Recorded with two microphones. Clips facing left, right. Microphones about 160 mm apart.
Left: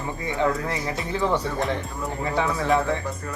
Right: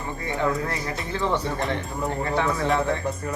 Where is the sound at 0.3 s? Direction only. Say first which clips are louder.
Left 1 dB; 20° left (ahead or behind).